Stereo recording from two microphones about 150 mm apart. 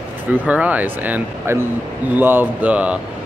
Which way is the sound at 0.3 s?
10° right (ahead or behind).